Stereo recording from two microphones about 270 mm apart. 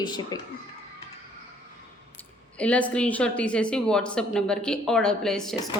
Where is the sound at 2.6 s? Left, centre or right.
Centre.